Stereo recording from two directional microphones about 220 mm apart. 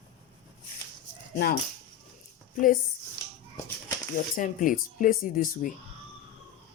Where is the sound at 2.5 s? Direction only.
35° left (ahead or behind).